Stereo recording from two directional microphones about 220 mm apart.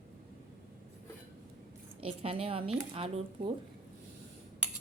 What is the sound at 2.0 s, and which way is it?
A woman's voice, 25° right (ahead or behind).